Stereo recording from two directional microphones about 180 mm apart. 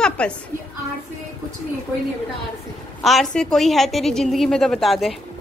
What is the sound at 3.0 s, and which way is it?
A woman's voice, centre (ahead or behind).